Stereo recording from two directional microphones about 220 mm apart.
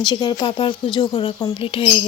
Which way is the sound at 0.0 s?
20° left (ahead or behind).